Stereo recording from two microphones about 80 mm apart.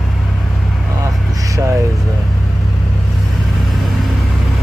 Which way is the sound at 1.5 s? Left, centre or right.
Right.